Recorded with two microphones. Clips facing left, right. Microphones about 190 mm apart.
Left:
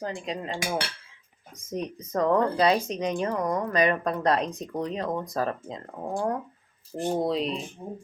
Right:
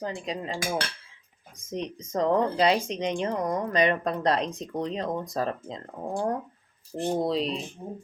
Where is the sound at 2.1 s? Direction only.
25° right (ahead or behind).